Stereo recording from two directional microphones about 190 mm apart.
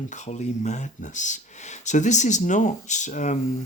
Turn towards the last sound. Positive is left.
turn(degrees=40)  # may be behind; listen again after turning